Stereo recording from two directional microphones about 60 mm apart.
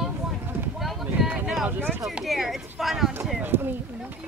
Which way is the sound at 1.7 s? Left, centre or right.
Right.